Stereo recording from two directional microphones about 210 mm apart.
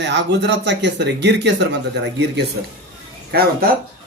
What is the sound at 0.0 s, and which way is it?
Speech, 55° right (ahead or behind).